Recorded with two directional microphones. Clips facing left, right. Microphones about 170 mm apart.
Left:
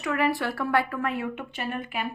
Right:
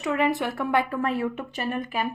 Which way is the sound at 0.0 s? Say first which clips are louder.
Right 2 dB; 20° right (ahead or behind).